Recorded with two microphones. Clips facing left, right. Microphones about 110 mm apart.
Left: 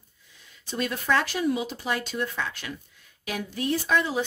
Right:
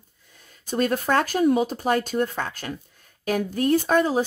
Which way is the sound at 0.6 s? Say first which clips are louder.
Right 5 dB; 45° right (ahead or behind).